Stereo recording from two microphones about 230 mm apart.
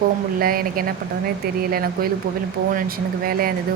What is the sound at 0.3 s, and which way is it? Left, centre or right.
Speech, right.